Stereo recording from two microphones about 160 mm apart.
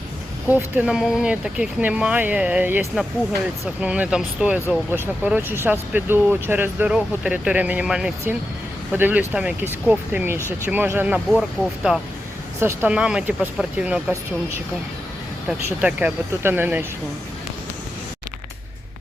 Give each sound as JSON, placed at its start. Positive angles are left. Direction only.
{"t": 0.4, "sound": "speech", "side_deg": -10}
{"t": 11.3, "sound": "speech", "side_deg": 0}
{"t": 12.5, "sound": "speech", "side_deg": -15}
{"t": 15.4, "sound": "speech", "side_deg": -10}